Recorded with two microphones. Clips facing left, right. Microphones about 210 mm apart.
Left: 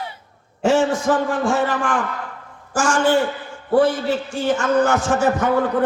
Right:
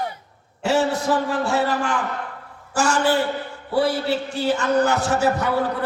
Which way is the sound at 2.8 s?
35° right (ahead or behind).